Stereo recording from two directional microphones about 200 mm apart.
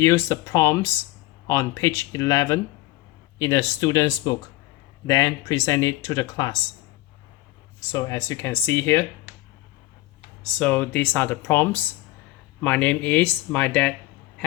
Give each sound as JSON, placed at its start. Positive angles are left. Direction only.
{"t": 0.0, "sound": "speech", "side_deg": 15}
{"t": 7.9, "sound": "speech", "side_deg": 15}
{"t": 10.4, "sound": "speech", "side_deg": 5}